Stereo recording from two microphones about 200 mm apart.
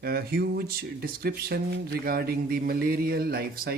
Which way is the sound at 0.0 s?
50° right (ahead or behind).